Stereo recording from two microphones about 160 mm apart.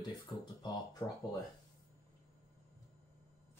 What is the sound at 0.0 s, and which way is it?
Speech, 25° left (ahead or behind).